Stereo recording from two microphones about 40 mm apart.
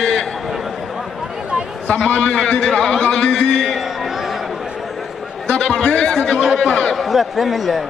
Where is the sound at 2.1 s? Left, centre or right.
Left.